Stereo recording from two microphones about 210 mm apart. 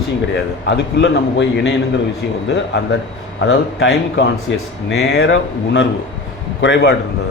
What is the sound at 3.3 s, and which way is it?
A man's voice, 60° left (ahead or behind).